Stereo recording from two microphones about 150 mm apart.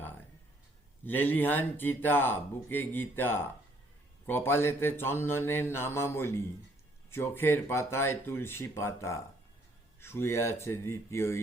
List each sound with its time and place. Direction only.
1.0 s speech: 15° left (ahead or behind)